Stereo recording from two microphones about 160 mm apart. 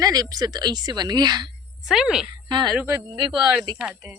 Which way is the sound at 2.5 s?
30° right (ahead or behind).